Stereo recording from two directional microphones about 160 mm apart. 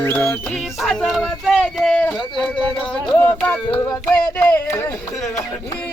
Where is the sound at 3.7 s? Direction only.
15° left (ahead or behind).